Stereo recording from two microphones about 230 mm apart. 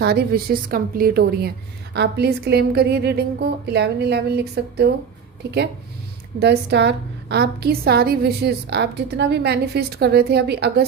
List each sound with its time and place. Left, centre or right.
0.0 s a woman's voice: right
6.4 s a woman's voice: right